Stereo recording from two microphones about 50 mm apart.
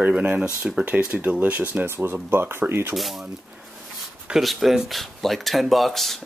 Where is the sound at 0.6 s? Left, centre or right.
Centre.